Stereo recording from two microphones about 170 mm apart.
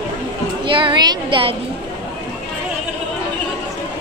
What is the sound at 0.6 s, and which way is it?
Speech, 30° right (ahead or behind).